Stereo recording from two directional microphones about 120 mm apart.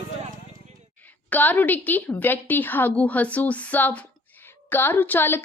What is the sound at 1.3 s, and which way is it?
A woman's voice, 15° left (ahead or behind).